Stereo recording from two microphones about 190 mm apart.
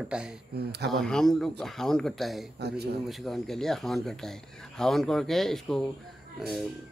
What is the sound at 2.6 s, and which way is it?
Speech, 60° right (ahead or behind).